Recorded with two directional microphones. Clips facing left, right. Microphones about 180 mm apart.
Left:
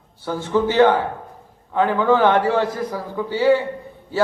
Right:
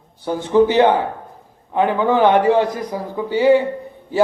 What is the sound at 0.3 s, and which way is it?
A man's voice, 15° right (ahead or behind).